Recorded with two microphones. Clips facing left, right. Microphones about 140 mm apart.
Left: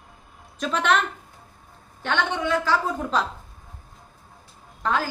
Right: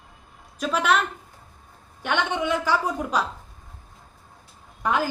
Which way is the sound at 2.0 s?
15° right (ahead or behind).